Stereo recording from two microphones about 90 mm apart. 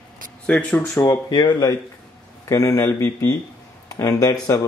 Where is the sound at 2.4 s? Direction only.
40° left (ahead or behind).